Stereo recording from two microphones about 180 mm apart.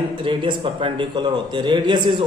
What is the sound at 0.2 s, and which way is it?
A man's voice, 30° right (ahead or behind).